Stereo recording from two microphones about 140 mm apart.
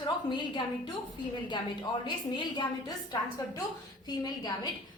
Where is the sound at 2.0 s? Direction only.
30° left (ahead or behind).